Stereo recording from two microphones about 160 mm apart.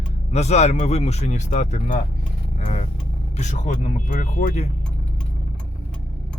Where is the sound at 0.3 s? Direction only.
45° left (ahead or behind).